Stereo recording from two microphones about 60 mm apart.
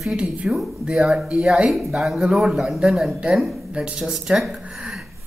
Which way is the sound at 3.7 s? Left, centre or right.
Centre.